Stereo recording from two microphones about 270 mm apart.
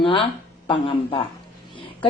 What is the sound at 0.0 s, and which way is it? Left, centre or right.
A woman's voice, centre.